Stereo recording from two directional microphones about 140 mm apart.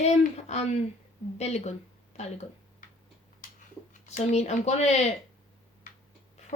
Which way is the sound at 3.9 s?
55° left (ahead or behind).